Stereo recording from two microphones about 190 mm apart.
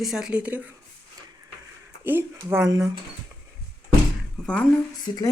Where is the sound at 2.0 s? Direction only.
10° right (ahead or behind).